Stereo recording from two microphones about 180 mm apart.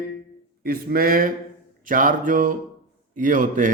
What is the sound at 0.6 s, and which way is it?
A man's voice, 55° right (ahead or behind).